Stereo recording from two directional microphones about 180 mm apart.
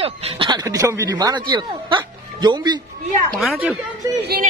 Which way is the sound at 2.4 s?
25° right (ahead or behind).